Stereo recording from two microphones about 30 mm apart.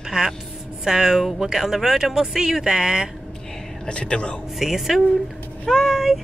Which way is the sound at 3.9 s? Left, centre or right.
Left.